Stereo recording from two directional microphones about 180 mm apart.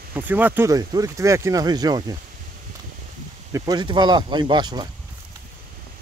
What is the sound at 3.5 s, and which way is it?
Speech, 20° right (ahead or behind).